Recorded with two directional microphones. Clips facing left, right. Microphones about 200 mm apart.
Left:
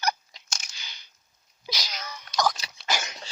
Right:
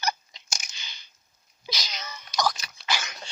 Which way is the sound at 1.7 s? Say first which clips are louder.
Left 1 dB; 10° left (ahead or behind).